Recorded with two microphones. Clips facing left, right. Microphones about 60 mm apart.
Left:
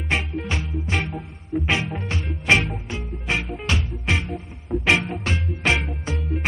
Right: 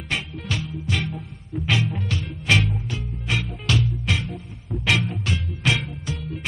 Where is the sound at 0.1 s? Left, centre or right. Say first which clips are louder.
Left 3 dB; left.